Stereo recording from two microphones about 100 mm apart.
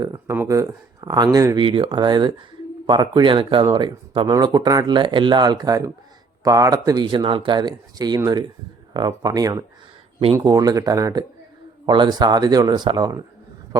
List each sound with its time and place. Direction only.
0.4 s speech: 35° right (ahead or behind)
1.5 s speech: 60° right (ahead or behind); by 4.9 s 40° right (ahead or behind)
4.9 s speech: 55° right (ahead or behind)